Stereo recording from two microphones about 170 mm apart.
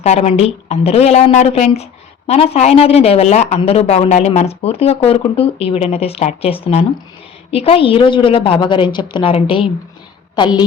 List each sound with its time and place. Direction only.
0.0 s a woman's voice: 40° left (ahead or behind)